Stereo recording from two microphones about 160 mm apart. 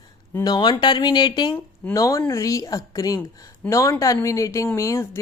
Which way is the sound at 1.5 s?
10° left (ahead or behind).